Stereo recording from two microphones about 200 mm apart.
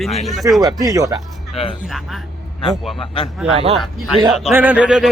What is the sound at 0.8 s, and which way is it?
Speech, 15° right (ahead or behind).